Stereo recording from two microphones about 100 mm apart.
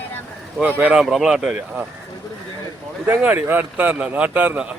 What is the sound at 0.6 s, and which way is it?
Speech, 15° right (ahead or behind).